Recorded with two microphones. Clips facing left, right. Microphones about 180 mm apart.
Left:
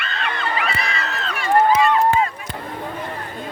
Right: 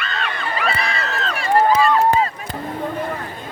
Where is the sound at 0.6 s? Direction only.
35° right (ahead or behind).